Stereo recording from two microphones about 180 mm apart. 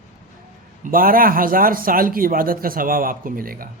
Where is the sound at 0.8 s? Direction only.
50° right (ahead or behind).